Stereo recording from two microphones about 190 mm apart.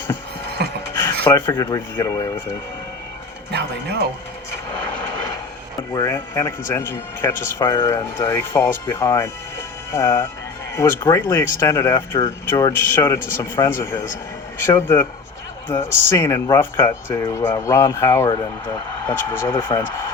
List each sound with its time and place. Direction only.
0.6 s music: 60° right (ahead or behind)
1.2 s speech: 15° left (ahead or behind)
5.9 s speech: 15° left (ahead or behind)